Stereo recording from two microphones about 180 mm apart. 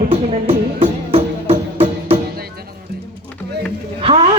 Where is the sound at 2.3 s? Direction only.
60° right (ahead or behind).